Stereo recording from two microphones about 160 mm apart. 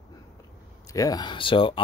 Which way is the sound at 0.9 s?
20° left (ahead or behind).